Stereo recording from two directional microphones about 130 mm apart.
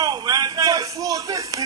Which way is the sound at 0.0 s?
30° right (ahead or behind).